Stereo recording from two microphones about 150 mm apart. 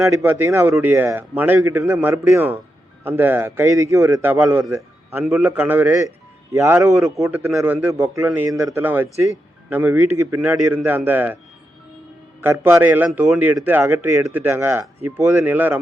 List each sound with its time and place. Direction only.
0.0 s a man's voice: 15° right (ahead or behind)
12.4 s a man's voice: 15° right (ahead or behind)